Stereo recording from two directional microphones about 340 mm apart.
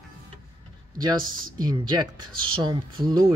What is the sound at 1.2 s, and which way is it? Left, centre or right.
Speech, right.